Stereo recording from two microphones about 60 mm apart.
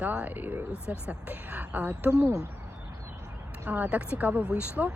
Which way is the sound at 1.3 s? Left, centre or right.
Right.